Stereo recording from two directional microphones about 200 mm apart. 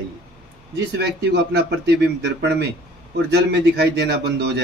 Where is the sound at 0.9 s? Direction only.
55° right (ahead or behind).